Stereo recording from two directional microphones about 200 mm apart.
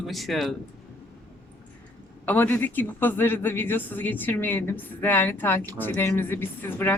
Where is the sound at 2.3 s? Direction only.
10° left (ahead or behind).